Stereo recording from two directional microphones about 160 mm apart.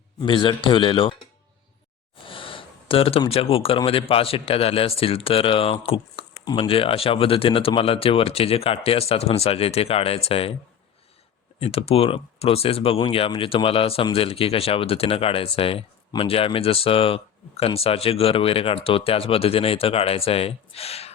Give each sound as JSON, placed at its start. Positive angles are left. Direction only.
{"t": 0.2, "sound": "speech", "side_deg": 30}
{"t": 2.2, "sound": "speech", "side_deg": 35}
{"t": 11.6, "sound": "speech", "side_deg": 40}